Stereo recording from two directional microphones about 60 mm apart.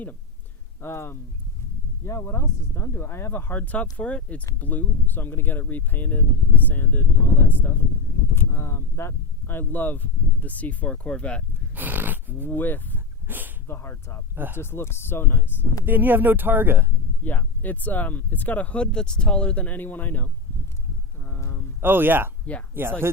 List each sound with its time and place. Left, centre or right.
0.8 s speech: left
3.6 s speech: left
11.7 s snort: right
12.5 s speech: left
13.2 s speech: right
13.7 s speech: left
15.9 s speech: right
17.2 s speech: left
21.8 s speech: right